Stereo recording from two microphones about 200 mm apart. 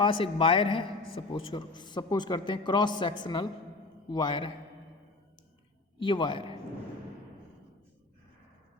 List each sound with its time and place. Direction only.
0.0 s a man's voice: 25° left (ahead or behind)
6.0 s a man's voice: 25° left (ahead or behind)